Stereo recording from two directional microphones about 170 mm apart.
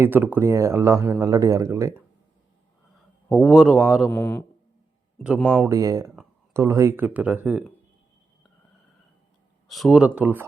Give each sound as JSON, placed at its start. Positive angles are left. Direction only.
{"t": 0.0, "sound": "speech", "side_deg": -10}
{"t": 3.3, "sound": "a man's voice", "side_deg": 0}
{"t": 4.1, "sound": "a man's voice", "side_deg": 10}
{"t": 5.6, "sound": "speech", "side_deg": -20}
{"t": 9.6, "sound": "speech", "side_deg": 0}